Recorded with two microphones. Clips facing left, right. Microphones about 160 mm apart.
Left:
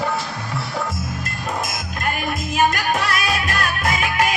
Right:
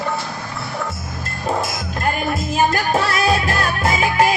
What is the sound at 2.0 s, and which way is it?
Music, 25° right (ahead or behind).